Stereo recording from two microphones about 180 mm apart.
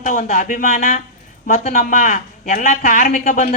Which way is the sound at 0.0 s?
50° left (ahead or behind).